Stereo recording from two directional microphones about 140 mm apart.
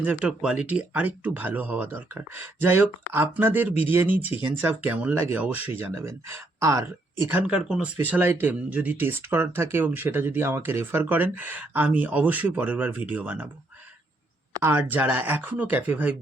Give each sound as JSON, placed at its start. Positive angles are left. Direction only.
{"t": 0.0, "sound": "speech", "side_deg": -10}
{"t": 14.6, "sound": "speech", "side_deg": -15}